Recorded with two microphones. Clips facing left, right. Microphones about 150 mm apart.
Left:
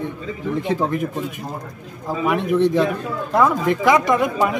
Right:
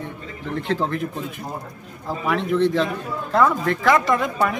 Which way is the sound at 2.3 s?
15° left (ahead or behind).